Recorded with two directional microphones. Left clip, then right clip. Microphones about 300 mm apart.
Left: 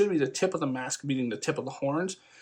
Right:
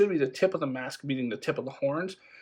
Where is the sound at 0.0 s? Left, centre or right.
Centre.